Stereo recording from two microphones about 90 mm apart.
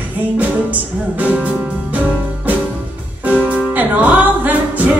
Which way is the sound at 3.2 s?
15° right (ahead or behind).